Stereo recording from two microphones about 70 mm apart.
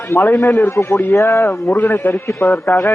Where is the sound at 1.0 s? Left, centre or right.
Left.